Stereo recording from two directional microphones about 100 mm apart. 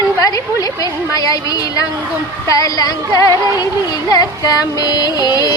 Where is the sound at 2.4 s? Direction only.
35° left (ahead or behind).